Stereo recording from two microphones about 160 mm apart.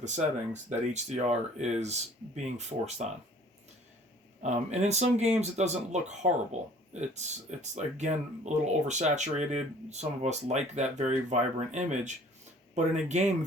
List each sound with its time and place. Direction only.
0.0 s speech: 45° right (ahead or behind)
4.4 s speech: 45° right (ahead or behind)